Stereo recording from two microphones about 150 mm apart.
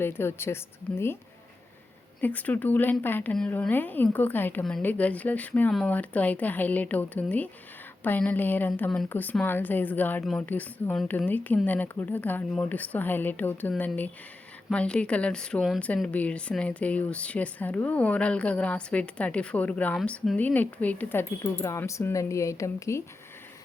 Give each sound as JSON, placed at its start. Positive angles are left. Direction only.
{"t": 0.0, "sound": "speech", "side_deg": 15}
{"t": 2.2, "sound": "speech", "side_deg": 10}